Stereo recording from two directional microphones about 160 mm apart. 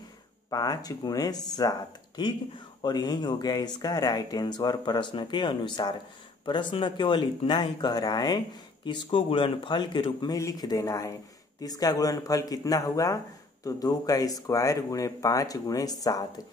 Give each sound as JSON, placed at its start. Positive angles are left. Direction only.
{"t": 0.5, "sound": "speech", "side_deg": 25}